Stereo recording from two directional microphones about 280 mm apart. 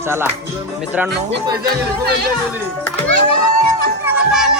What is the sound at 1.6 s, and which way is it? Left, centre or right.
Speech, right.